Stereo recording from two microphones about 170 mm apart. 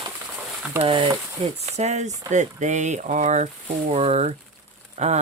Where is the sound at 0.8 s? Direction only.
30° right (ahead or behind).